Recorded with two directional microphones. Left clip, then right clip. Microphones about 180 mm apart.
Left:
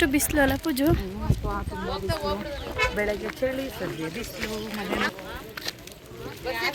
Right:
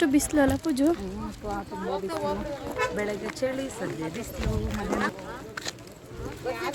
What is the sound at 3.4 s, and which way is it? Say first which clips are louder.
Speech: even; 30° left (ahead or behind).